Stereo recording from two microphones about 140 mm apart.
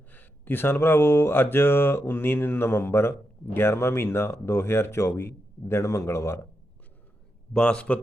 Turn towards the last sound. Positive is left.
turn(degrees=10)  # may be behind; listen again after turning